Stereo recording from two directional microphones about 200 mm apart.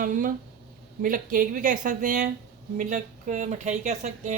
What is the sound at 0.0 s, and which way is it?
A woman's voice, 40° right (ahead or behind).